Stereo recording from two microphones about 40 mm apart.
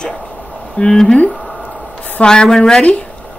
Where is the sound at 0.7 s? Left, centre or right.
Left.